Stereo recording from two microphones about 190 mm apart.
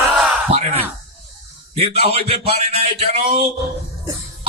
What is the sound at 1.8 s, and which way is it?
Speech, 30° right (ahead or behind).